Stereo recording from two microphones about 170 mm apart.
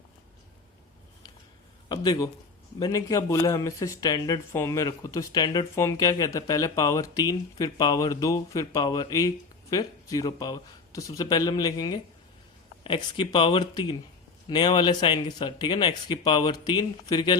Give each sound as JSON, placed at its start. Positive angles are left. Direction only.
{"t": 1.9, "sound": "speech", "side_deg": 20}